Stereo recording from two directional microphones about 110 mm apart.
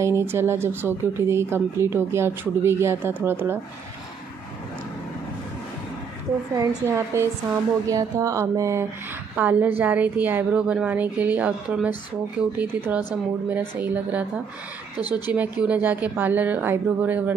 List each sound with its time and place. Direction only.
0.0 s speech: 25° right (ahead or behind)
6.9 s speech: 25° right (ahead or behind)
9.3 s a woman's voice: 15° right (ahead or behind)
15.3 s a woman's voice: 15° right (ahead or behind)